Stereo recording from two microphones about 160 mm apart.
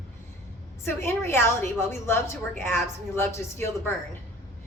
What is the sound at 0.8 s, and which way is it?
A woman's voice, 15° left (ahead or behind).